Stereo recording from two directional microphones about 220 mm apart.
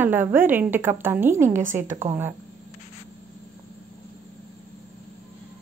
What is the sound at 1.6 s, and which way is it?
Speech, 35° right (ahead or behind).